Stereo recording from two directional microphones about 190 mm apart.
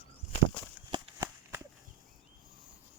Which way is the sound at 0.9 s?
20° right (ahead or behind).